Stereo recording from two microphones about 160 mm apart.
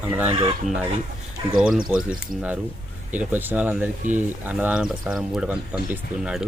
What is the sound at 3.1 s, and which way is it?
Speech, 10° right (ahead or behind).